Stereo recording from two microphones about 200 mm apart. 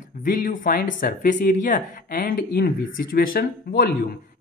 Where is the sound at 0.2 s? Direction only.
40° left (ahead or behind).